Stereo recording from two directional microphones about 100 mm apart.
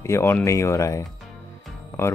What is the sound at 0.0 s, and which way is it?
Speech, 25° left (ahead or behind).